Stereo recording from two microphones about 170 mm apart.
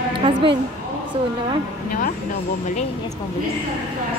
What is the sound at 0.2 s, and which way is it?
Speech, 30° right (ahead or behind).